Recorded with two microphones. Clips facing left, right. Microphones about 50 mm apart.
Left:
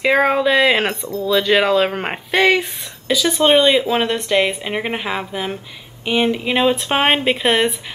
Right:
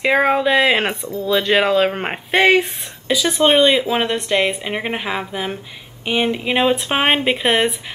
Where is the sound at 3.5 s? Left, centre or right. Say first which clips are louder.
Left 1 dB; centre.